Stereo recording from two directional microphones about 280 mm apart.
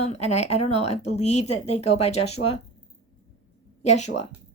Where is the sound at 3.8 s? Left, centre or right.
Left.